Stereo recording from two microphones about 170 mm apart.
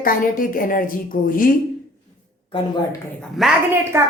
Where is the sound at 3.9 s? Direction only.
15° right (ahead or behind).